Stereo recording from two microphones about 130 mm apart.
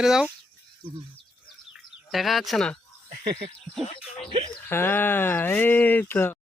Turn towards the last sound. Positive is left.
turn(degrees=15)  # may be behind; listen again after turning